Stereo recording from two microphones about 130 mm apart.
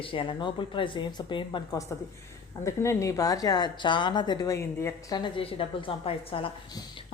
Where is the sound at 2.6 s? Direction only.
20° left (ahead or behind).